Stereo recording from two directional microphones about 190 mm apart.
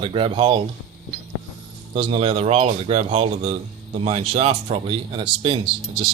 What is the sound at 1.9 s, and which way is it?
Speech, 30° right (ahead or behind).